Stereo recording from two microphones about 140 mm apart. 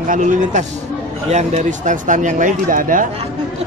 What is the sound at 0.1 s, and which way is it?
Speech, 60° right (ahead or behind).